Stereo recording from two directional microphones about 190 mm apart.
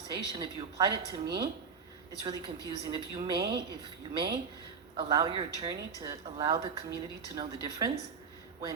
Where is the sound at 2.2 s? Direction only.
25° right (ahead or behind).